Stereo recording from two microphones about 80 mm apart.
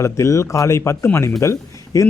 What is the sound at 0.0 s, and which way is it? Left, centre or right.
Speech, left.